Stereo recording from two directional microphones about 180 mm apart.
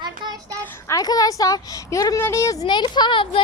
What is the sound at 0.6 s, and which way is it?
Speech, 15° left (ahead or behind).